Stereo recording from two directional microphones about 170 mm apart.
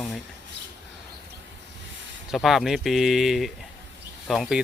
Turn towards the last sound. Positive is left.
turn(degrees=0)  # may be behind; listen again after turning